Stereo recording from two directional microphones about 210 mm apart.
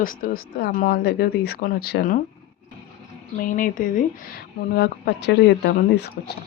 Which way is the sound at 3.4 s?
40° left (ahead or behind).